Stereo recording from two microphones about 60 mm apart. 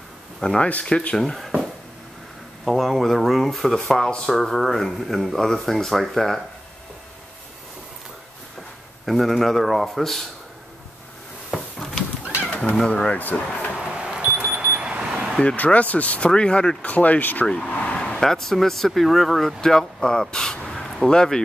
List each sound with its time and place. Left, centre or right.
0.4 s speech: centre
9.0 s speech: centre
11.5 s a sound: centre
12.4 s pigeon: left
12.8 s speech: centre
13.7 s a sound: centre
14.3 s alarm clock: right
14.8 s alarm clock: centre
15.4 s speech: left
17.5 s speech: centre